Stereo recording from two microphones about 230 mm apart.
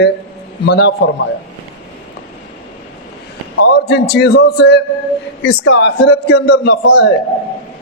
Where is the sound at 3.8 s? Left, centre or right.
Left.